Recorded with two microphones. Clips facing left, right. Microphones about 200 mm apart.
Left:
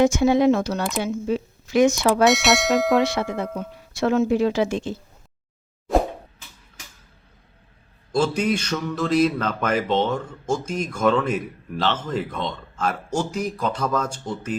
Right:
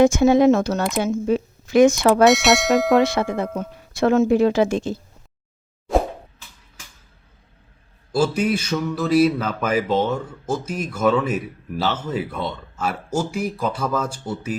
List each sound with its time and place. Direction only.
0.0 s speech: 50° right (ahead or behind)
2.2 s bell: centre (ahead or behind)
3.3 s speech: 50° right (ahead or behind)
8.1 s a sound: 5° right (ahead or behind)